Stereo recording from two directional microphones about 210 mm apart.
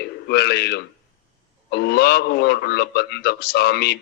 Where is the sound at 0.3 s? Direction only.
50° left (ahead or behind).